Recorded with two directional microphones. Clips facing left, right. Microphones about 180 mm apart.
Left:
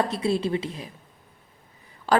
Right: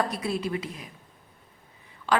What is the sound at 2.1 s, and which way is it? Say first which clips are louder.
Speech: left 4 dB; 40° left (ahead or behind).